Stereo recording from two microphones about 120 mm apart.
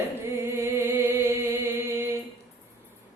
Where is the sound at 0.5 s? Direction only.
25° right (ahead or behind).